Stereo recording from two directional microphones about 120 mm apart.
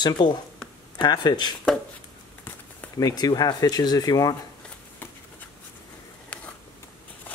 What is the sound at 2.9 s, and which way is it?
Speech, 30° left (ahead or behind).